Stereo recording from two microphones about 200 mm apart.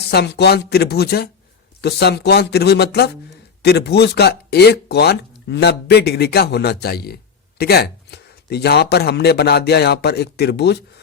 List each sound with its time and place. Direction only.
0.1 s speech: 55° left (ahead or behind)